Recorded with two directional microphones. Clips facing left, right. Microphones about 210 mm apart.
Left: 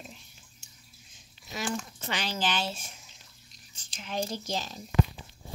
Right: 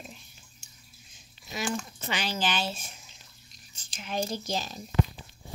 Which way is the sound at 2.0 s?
10° right (ahead or behind).